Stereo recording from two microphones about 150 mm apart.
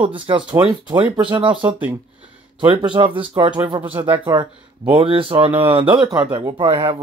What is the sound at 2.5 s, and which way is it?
Speech, 35° right (ahead or behind).